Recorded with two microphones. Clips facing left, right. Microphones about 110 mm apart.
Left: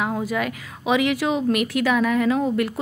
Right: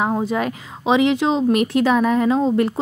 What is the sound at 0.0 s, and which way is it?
A woman's voice, 25° right (ahead or behind).